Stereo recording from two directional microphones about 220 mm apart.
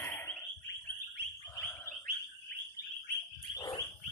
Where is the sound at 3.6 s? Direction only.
15° left (ahead or behind).